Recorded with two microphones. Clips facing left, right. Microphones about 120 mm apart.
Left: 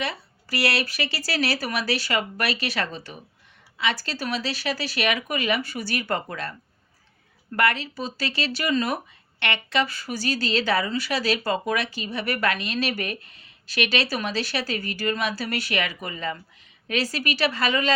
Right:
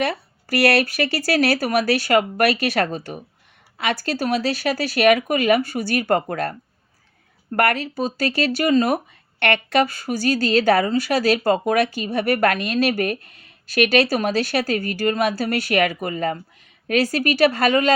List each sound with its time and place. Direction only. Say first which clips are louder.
0.0 s speech: right 7 dB; 55° right (ahead or behind)